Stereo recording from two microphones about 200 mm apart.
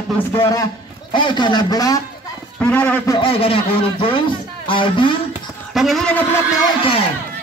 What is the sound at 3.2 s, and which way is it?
A man's voice, 25° left (ahead or behind).